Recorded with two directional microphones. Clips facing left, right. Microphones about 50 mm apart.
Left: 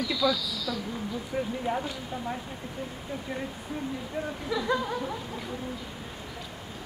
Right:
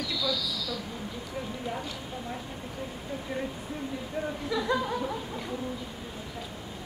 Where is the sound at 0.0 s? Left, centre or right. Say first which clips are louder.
Left 4 dB; centre.